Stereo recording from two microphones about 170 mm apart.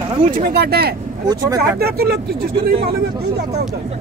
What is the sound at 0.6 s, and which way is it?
Speech, 70° right (ahead or behind).